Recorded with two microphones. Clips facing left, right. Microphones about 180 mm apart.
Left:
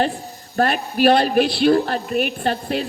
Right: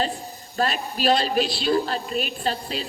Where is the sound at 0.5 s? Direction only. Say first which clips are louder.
Left 6 dB; 60° left (ahead or behind).